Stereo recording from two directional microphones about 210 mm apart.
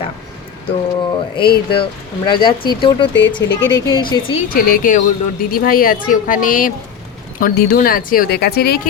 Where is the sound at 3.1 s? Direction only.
55° left (ahead or behind).